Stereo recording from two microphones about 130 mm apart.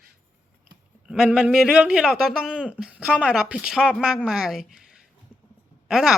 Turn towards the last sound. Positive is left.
turn(degrees=-5)  # may be behind; listen again after turning